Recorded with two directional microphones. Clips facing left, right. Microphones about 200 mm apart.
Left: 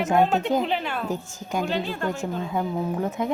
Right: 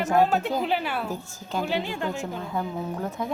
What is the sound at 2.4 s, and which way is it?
Speech, 15° left (ahead or behind).